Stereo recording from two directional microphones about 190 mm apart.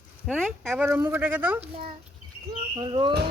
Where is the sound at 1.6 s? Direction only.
30° right (ahead or behind).